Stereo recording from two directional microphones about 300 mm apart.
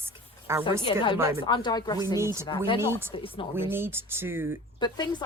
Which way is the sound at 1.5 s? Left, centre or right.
Centre.